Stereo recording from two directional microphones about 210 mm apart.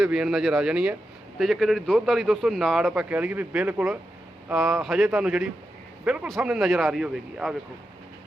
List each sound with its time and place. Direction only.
0.0 s a man's voice: 5° right (ahead or behind)